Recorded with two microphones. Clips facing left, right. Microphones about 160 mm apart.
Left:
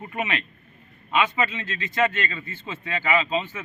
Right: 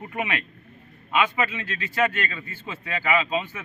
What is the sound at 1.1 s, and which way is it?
Speech, 10° right (ahead or behind).